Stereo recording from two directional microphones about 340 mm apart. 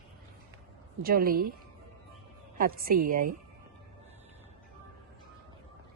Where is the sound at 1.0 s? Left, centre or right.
Right.